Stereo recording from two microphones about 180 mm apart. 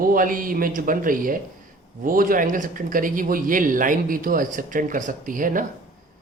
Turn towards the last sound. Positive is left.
turn(degrees=-50)  # may be behind; listen again after turning